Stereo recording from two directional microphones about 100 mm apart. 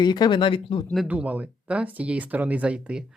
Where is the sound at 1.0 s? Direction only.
15° right (ahead or behind).